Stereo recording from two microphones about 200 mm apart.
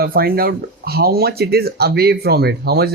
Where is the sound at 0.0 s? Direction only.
50° right (ahead or behind).